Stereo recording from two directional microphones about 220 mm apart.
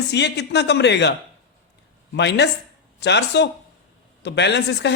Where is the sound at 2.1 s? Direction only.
50° left (ahead or behind).